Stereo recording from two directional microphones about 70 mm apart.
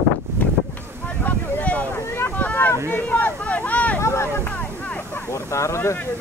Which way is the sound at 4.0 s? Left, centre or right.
Left.